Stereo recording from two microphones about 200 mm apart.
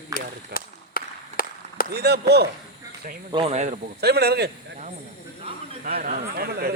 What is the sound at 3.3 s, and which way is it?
Speech, 30° right (ahead or behind).